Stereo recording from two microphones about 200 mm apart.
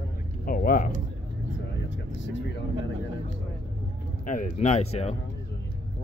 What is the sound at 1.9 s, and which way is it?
Vehicle, 65° left (ahead or behind).